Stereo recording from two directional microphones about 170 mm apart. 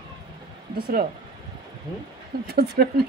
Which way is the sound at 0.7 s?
65° right (ahead or behind).